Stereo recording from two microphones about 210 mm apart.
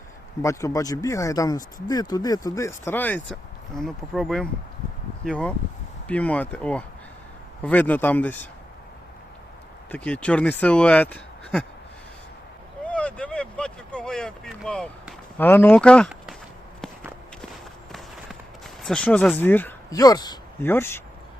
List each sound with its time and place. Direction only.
0.4 s speech: 15° left (ahead or behind)
9.9 s speech: 5° left (ahead or behind)
12.8 s vehicle: 5° left (ahead or behind)
18.8 s speech: 5° left (ahead or behind)